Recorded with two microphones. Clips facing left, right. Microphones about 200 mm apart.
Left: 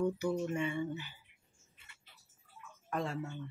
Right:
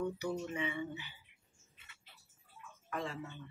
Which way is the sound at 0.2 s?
50° left (ahead or behind).